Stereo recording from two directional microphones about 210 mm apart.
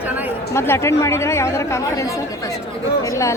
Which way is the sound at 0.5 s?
10° left (ahead or behind).